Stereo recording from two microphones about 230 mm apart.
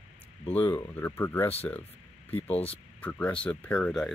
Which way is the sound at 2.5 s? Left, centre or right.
Left.